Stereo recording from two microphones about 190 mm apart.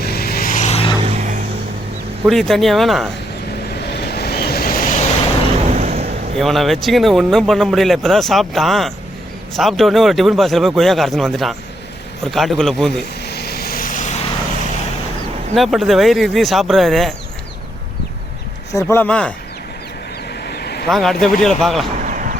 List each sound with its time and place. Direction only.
0.0 s vehicle: 55° left (ahead or behind); by 0.9 s 30° left (ahead or behind)
1.0 s vehicle: 40° right (ahead or behind)
2.2 s a man's voice: centre (ahead or behind)
4.0 s vehicle: 55° left (ahead or behind)
5.6 s vehicle: 35° right (ahead or behind)
6.3 s a man's voice: centre (ahead or behind)
13.2 s vehicle: 55° left (ahead or behind); by 14.2 s 40° left (ahead or behind)
15.5 s a man's voice: centre (ahead or behind)
18.7 s speech: 15° left (ahead or behind)
20.4 s a sound: 60° left (ahead or behind)
20.8 s a man's voice: centre (ahead or behind)
21.9 s a sound: 40° right (ahead or behind)